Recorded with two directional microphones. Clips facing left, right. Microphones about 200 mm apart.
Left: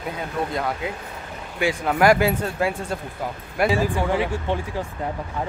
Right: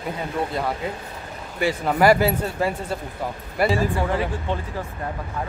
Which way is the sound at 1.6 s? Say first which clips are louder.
Even; centre (ahead or behind).